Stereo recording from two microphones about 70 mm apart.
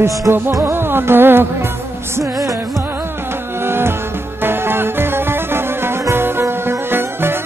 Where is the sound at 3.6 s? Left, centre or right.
Right.